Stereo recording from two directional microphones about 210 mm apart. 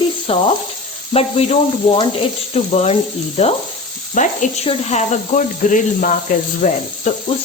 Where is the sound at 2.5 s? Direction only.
30° left (ahead or behind).